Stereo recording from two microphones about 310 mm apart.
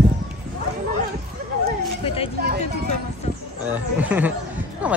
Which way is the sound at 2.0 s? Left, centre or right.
Centre.